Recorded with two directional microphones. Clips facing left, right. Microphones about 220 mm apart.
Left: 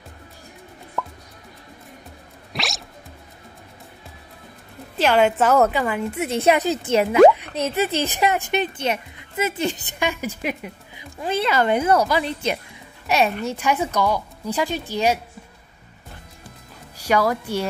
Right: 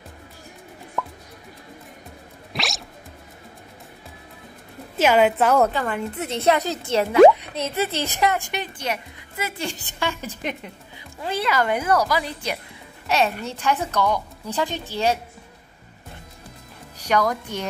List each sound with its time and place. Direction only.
1.0 s music: centre (ahead or behind)
2.5 s music: centre (ahead or behind)
5.0 s a woman's voice: 5° right (ahead or behind)
5.7 s a woman's voice: 15° left (ahead or behind)
11.2 s a woman's voice: 25° left (ahead or behind)
13.0 s a child's voice: 15° left (ahead or behind)
17.0 s a woman's voice: 5° left (ahead or behind)